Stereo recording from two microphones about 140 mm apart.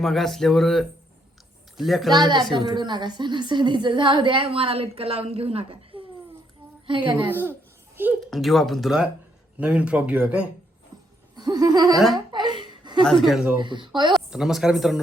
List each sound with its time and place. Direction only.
0.0 s speech: centre (ahead or behind)
2.1 s a woman's voice: 30° right (ahead or behind)
7.3 s speech: 15° right (ahead or behind)
8.3 s speech: centre (ahead or behind)
11.3 s music: 25° right (ahead or behind)
11.9 s speech: centre (ahead or behind)
12.3 s a sound: 30° right (ahead or behind)
13.1 s speech: centre (ahead or behind)
13.6 s a woman's voice: 35° right (ahead or behind)
14.1 s speech: 5° right (ahead or behind)